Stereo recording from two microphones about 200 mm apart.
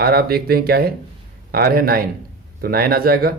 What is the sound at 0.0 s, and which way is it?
Speech, 50° right (ahead or behind).